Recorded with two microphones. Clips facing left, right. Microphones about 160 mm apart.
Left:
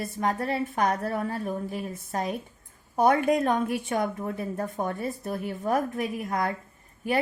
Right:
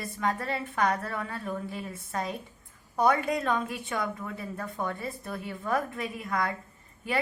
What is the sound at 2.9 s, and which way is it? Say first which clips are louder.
A woman's voice: left 4 dB; 45° left (ahead or behind).